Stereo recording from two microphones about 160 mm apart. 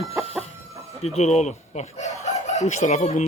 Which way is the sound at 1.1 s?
45° left (ahead or behind).